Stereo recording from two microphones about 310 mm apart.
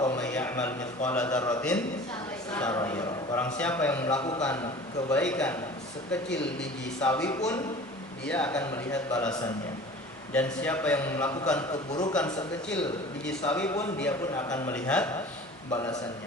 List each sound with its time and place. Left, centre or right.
0.0 s a man's voice: centre
6.2 s speech: left
6.6 s a man's voice: centre